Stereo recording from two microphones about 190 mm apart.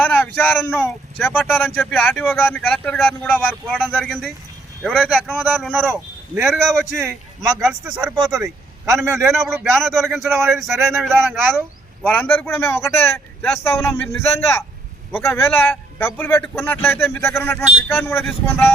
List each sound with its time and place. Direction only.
0.0 s speech: 5° left (ahead or behind)
5.8 s speech: 10° right (ahead or behind)
6.4 s speech: centre (ahead or behind)
8.0 s a man's voice: 20° right (ahead or behind)
9.6 s speech: centre (ahead or behind)